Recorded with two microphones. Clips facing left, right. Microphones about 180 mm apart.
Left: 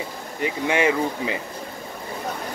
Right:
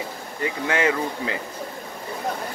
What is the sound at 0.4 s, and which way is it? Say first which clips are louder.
A man's voice: left 2 dB; 20° left (ahead or behind).